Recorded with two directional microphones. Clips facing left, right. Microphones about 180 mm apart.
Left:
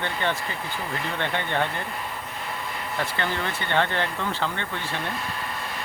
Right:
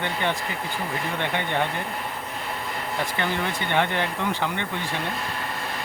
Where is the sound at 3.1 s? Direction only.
15° right (ahead or behind).